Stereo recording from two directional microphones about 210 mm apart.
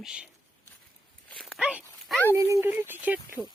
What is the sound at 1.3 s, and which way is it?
Dog, centre (ahead or behind).